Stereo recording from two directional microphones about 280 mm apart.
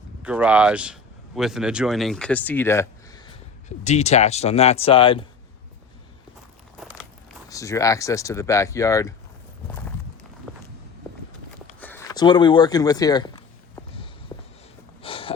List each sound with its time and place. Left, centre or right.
0.2 s speech: centre
3.8 s speech: left
6.7 s biting: centre
7.5 s speech: centre
11.8 s a sound: centre
15.0 s snort: centre